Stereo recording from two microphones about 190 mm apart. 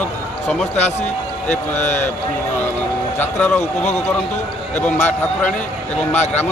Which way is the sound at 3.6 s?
35° left (ahead or behind).